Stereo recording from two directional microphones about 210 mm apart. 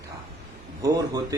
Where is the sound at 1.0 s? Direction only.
15° right (ahead or behind).